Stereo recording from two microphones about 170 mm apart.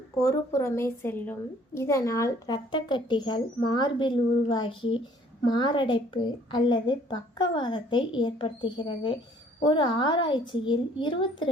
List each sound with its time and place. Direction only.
0.2 s a woman's voice: 15° left (ahead or behind)